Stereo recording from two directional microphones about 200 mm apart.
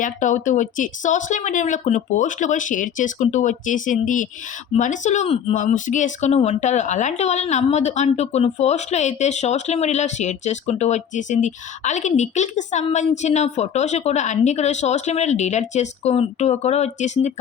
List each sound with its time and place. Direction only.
0.0 s speech: 40° left (ahead or behind)